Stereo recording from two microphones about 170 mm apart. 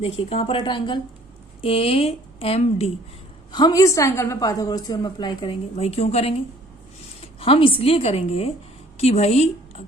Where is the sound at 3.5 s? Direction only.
25° left (ahead or behind).